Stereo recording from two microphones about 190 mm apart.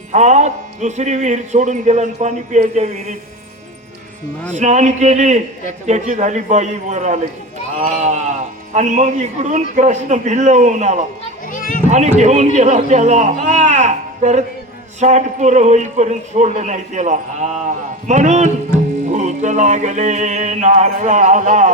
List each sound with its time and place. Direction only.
0.1 s a man's voice: 40° right (ahead or behind)
4.5 s a man's voice: 40° right (ahead or behind)
11.5 s children playing: 45° left (ahead or behind)
11.9 s a man's voice: 40° right (ahead or behind)